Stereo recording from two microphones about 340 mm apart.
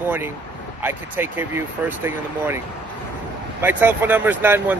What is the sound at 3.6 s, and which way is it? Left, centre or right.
Speech, centre.